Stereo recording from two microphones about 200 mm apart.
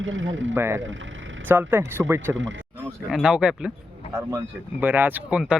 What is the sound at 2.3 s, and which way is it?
Speech, 65° right (ahead or behind).